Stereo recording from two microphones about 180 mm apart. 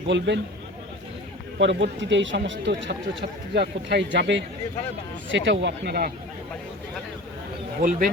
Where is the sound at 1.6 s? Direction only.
90° right.